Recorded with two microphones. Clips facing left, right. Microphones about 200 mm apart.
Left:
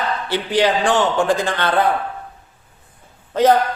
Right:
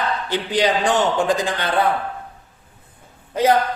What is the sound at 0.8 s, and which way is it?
Speech, 20° right (ahead or behind).